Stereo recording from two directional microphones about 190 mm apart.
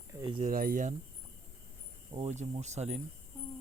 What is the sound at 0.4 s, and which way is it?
Speech, 50° right (ahead or behind).